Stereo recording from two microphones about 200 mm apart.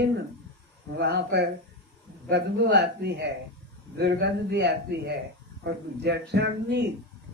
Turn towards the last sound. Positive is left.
turn(degrees=-55)  # may be behind; listen again after turning